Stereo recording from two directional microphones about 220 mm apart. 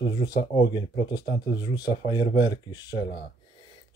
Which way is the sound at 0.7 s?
20° left (ahead or behind).